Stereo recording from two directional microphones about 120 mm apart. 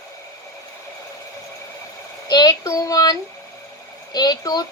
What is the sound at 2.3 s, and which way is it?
Speech, 35° left (ahead or behind).